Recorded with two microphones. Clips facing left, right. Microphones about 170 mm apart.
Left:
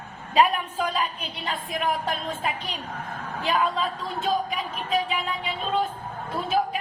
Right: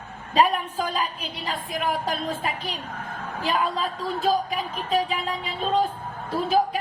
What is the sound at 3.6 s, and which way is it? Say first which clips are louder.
A woman's voice: even; 35° right (ahead or behind).